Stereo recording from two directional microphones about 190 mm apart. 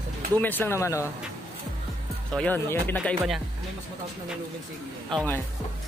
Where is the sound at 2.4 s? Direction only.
10° left (ahead or behind).